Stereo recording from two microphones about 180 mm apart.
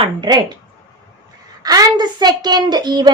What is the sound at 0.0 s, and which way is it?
Speech, 25° right (ahead or behind).